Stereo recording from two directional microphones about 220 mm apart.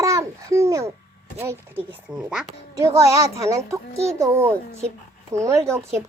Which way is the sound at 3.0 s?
15° right (ahead or behind).